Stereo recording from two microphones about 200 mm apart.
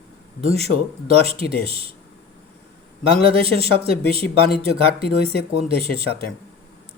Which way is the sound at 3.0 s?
30° right (ahead or behind).